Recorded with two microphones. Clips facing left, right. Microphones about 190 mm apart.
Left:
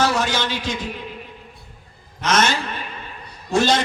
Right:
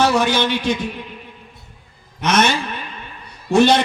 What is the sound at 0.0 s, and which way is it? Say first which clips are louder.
Speech: right 4 dB; 60° right (ahead or behind).